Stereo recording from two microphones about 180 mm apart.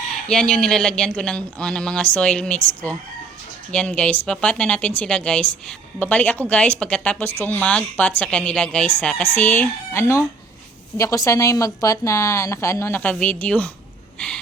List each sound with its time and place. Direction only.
0.3 s speech: 5° left (ahead or behind)
3.7 s a woman's voice: 5° left (ahead or behind)